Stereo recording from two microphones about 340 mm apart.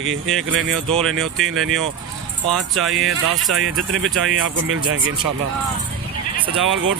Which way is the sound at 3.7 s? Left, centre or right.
Right.